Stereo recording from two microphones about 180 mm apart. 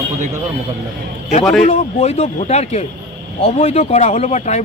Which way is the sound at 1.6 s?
35° left (ahead or behind).